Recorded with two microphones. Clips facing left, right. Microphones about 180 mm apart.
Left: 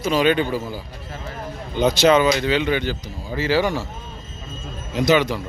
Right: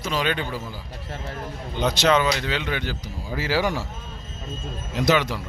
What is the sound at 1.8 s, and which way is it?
Speech, 5° left (ahead or behind).